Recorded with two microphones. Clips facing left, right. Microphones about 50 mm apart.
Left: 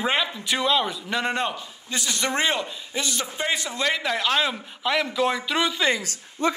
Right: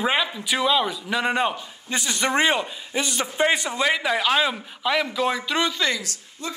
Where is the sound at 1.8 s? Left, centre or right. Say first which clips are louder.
Right 3 dB; right; by 5.7 s centre.